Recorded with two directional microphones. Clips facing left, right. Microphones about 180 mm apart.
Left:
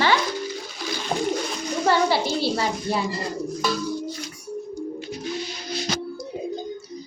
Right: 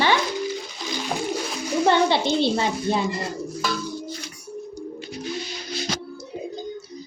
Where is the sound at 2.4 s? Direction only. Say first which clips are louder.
Right 2 dB; 20° right (ahead or behind).